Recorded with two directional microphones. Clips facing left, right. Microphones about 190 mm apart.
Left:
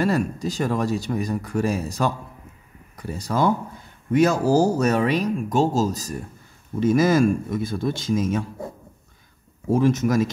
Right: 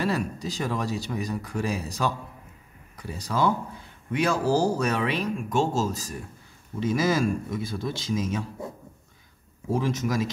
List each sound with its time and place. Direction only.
0.0 s a man's voice: 50° left (ahead or behind)
6.8 s a man's voice: 50° left (ahead or behind)
9.7 s a man's voice: 50° left (ahead or behind)